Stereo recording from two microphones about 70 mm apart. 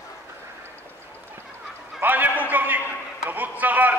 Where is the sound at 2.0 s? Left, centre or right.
Right.